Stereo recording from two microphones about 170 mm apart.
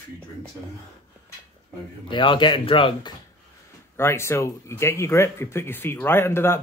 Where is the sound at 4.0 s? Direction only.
15° left (ahead or behind).